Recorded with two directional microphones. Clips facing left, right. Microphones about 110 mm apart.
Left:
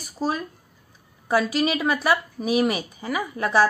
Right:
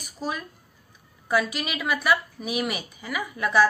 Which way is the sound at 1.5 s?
35° left (ahead or behind).